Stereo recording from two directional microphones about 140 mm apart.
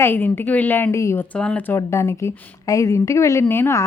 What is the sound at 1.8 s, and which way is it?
A woman's voice, 20° left (ahead or behind).